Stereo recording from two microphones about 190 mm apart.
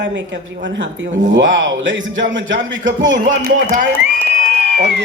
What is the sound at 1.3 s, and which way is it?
Speech, 75° right (ahead or behind).